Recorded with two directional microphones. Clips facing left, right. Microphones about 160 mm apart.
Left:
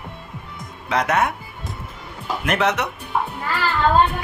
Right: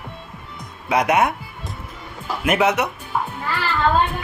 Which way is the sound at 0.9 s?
10° right (ahead or behind).